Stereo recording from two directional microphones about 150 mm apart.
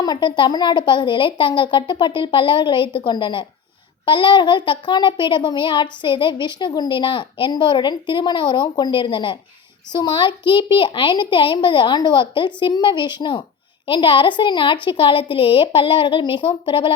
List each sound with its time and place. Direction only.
0.0 s a child's voice: 30° left (ahead or behind)